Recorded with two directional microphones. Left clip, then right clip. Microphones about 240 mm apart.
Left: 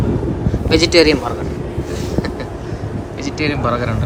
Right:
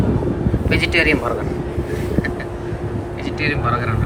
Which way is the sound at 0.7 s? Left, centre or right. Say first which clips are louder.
Left 5 dB; centre.